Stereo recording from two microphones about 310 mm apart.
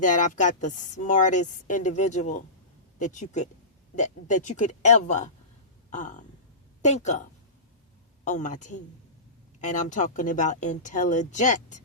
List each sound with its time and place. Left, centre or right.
0.0 s a woman's voice: left